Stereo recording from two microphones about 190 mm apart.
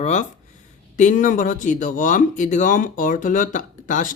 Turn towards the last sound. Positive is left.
turn(degrees=45)  # may be behind; listen again after turning